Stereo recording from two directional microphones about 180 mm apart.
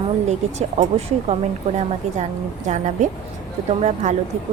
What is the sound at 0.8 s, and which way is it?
Speech, 35° right (ahead or behind).